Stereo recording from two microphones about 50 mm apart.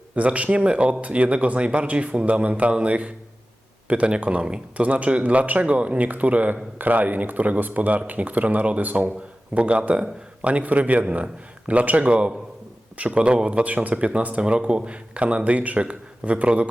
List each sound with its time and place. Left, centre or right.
0.2 s a man's voice: right